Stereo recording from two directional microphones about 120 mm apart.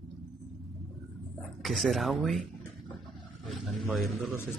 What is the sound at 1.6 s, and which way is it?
Speech, centre (ahead or behind).